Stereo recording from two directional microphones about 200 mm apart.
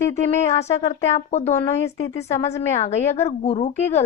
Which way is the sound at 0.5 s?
30° left (ahead or behind).